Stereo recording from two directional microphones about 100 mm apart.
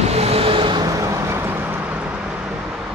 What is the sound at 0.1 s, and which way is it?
Vehicle, 85° right.